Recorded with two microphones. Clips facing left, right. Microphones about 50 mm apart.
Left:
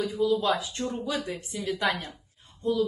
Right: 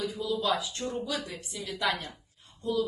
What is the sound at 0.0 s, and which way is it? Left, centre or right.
A man's voice, left.